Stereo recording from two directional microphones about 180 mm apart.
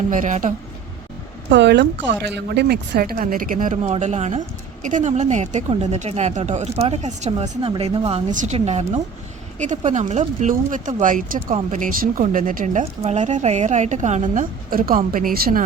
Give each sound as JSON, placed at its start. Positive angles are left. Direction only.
{"t": 0.1, "sound": "a woman's voice", "side_deg": -45}
{"t": 1.5, "sound": "a woman's voice", "side_deg": -80}